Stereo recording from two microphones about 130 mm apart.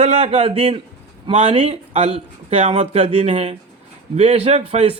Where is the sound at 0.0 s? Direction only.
55° right (ahead or behind).